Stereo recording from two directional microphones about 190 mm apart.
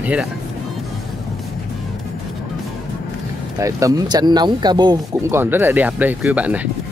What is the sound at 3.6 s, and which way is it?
Speech, 15° right (ahead or behind).